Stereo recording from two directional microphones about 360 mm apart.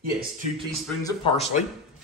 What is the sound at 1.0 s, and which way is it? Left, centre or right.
Speech, centre.